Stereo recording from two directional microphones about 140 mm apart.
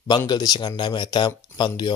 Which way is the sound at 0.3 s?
30° left (ahead or behind).